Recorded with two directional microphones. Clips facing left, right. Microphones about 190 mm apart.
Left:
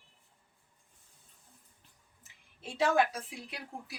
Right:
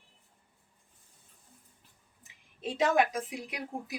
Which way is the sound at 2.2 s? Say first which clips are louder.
Right 9 dB; 15° right (ahead or behind).